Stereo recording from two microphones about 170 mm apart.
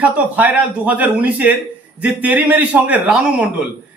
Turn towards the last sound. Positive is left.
turn(degrees=-5)  # may be behind; listen again after turning